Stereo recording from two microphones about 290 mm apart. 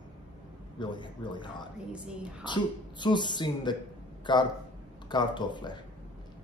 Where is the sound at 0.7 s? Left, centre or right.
Centre.